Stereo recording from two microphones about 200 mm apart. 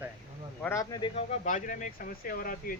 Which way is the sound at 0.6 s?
15° left (ahead or behind).